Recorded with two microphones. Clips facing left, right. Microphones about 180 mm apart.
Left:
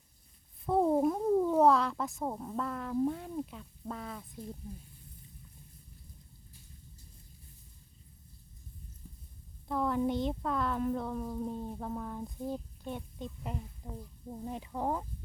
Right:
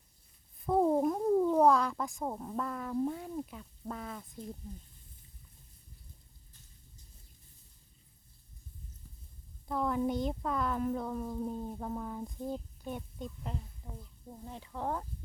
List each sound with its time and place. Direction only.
0.6 s speech: centre (ahead or behind)
9.6 s a woman's voice: centre (ahead or behind)
13.8 s speech: 25° left (ahead or behind)